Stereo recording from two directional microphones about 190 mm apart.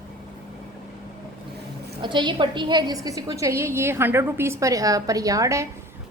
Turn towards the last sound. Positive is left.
turn(degrees=-15)  # may be behind; listen again after turning